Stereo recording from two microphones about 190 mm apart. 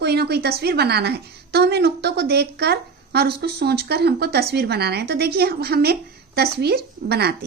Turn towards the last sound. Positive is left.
turn(degrees=-55)  # may be behind; listen again after turning